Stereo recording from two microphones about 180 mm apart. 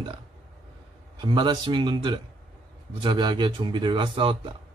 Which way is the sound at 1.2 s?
25° right (ahead or behind).